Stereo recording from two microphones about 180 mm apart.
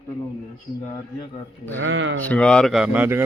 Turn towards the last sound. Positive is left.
turn(degrees=-10)  # may be behind; listen again after turning